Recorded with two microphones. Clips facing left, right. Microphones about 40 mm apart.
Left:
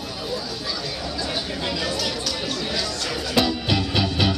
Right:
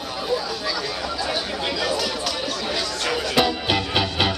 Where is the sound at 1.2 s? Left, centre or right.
Centre.